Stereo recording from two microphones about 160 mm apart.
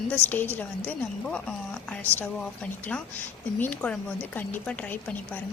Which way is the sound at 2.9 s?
10° left (ahead or behind).